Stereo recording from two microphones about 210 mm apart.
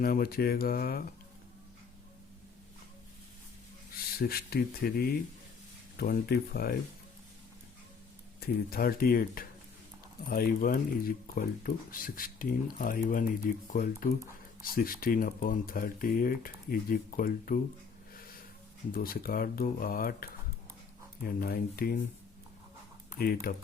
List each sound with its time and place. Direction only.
0.0 s speech: 45° left (ahead or behind)
3.9 s speech: 45° left (ahead or behind)
8.4 s speech: 45° left (ahead or behind)
18.9 s speech: 45° left (ahead or behind)
23.1 s speech: 45° left (ahead or behind)